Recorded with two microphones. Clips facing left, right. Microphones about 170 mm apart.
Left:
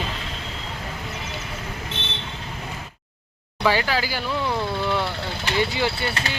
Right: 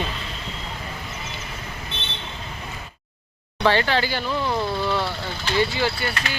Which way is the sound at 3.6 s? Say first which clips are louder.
Right 2 dB; 5° left (ahead or behind).